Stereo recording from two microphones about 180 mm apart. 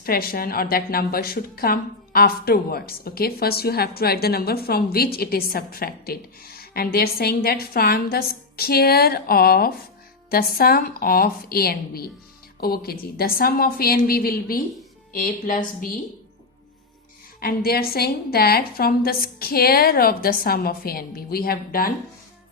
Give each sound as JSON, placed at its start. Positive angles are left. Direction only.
{"t": 0.0, "sound": "a woman's voice", "side_deg": 55}
{"t": 17.4, "sound": "a woman's voice", "side_deg": 60}